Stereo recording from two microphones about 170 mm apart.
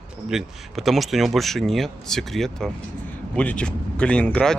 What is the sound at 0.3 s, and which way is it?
Speech, centre (ahead or behind).